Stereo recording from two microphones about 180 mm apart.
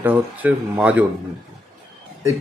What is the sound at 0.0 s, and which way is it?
Speech, 10° right (ahead or behind).